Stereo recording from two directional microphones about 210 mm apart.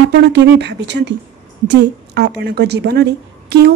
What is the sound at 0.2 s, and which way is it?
A woman's voice, 55° right (ahead or behind).